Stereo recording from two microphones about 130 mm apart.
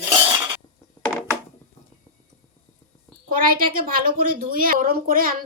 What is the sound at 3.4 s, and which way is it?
Speech, 90° right.